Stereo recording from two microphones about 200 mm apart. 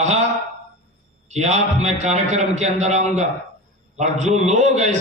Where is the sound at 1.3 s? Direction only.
35° right (ahead or behind).